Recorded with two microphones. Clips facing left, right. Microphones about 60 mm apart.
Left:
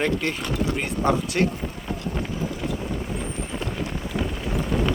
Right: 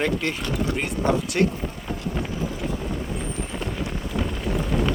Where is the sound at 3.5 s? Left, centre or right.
Centre.